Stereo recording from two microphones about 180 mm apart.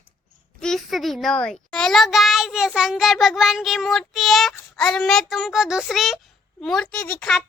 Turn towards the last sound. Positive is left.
turn(degrees=5)  # may be behind; listen again after turning